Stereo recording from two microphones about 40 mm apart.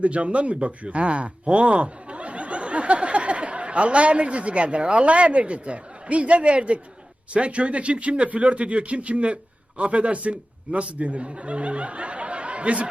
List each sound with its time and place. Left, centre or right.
0.0 s speech: right